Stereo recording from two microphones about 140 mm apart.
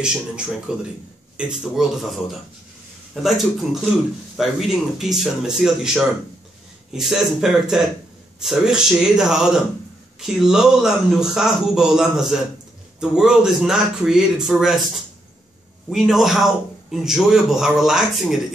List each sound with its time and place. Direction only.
0.0 s a man's voice: 5° right (ahead or behind)
3.2 s a man's voice: centre (ahead or behind)
15.9 s a man's voice: centre (ahead or behind)